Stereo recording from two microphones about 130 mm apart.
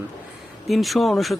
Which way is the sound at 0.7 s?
Centre (ahead or behind).